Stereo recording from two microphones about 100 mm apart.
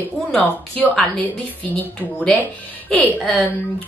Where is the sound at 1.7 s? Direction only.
15° left (ahead or behind).